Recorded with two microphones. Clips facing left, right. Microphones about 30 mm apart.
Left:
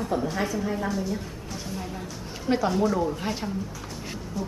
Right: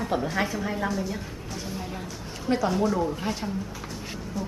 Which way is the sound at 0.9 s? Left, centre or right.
Centre.